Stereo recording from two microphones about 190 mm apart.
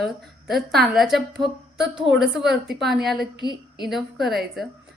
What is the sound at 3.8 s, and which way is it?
Speech, centre (ahead or behind).